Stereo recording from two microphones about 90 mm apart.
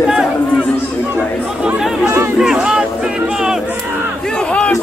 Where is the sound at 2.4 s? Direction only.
10° right (ahead or behind).